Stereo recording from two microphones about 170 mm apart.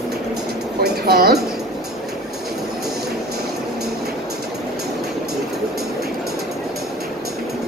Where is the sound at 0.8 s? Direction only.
65° right (ahead or behind).